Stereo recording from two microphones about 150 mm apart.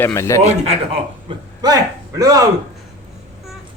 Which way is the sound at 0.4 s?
40° right (ahead or behind).